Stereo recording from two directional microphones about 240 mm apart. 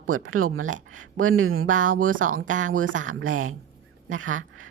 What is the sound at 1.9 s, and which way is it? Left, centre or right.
Speech, right.